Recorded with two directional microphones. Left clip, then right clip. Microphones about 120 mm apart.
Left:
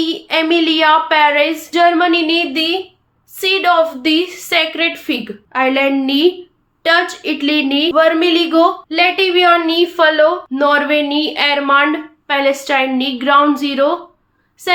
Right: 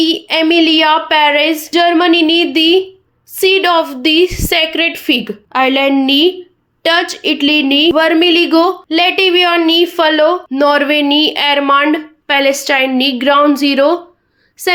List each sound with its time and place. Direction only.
0.0 s speech: 45° right (ahead or behind)